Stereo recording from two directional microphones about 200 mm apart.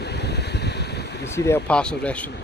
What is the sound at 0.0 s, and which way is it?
Ocean, 55° left (ahead or behind).